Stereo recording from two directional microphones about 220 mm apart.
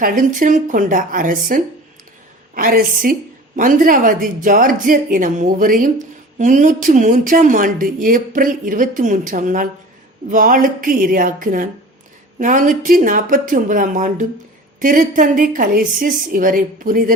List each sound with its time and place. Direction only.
0.0 s a woman's voice: 40° right (ahead or behind)